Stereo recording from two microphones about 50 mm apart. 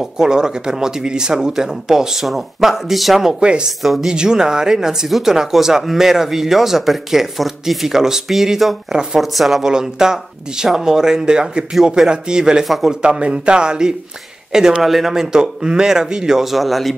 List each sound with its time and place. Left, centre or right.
0.0 s speech: centre
3.3 s speech: centre
3.8 s a woman's voice: centre
4.1 s a woman's voice: centre
9.7 s speech: centre
12.6 s a woman's voice: centre
13.0 s speech: centre